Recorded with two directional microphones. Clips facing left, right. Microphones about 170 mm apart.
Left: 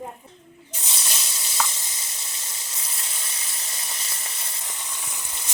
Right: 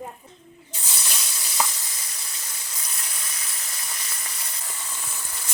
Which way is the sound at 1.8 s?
25° left (ahead or behind).